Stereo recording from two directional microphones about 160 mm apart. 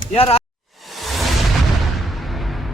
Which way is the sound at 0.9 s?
Centre (ahead or behind).